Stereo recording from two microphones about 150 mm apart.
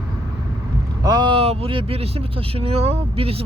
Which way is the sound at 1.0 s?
30° right (ahead or behind).